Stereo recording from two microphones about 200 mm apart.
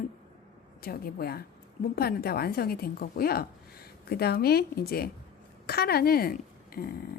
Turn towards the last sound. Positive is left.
turn(degrees=50)  # may be behind; listen again after turning